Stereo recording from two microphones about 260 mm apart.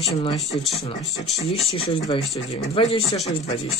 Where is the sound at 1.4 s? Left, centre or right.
Left.